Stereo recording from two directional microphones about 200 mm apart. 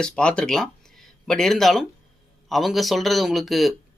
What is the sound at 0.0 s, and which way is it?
Speech, 5° left (ahead or behind).